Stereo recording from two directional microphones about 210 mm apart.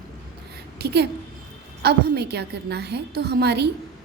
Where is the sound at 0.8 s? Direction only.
50° right (ahead or behind).